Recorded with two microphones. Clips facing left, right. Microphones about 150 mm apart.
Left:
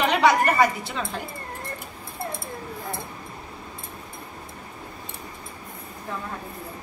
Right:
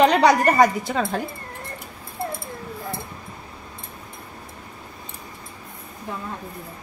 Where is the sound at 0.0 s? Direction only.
40° right (ahead or behind).